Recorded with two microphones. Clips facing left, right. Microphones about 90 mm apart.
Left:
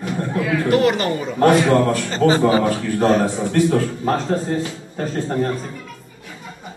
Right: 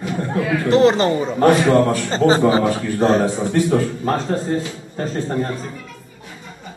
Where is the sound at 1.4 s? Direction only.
Centre (ahead or behind).